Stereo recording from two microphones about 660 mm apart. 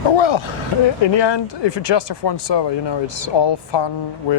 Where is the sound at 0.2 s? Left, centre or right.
Left.